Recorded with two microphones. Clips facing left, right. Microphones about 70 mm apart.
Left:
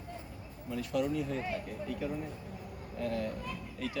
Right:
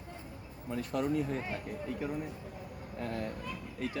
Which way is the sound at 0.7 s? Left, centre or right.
Right.